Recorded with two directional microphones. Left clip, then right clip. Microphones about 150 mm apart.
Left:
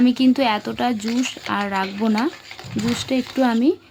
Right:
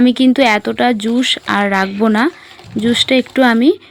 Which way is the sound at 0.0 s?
30° right (ahead or behind).